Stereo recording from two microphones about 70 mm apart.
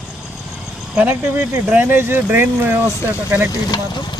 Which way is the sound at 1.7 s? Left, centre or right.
Right.